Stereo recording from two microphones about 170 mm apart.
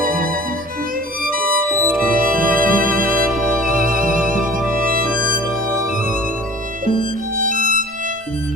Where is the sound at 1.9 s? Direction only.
55° right (ahead or behind).